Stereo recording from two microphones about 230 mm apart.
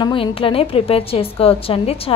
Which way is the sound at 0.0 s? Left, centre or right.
Left.